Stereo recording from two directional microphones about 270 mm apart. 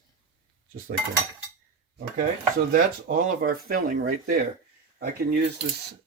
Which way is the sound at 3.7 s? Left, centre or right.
Right.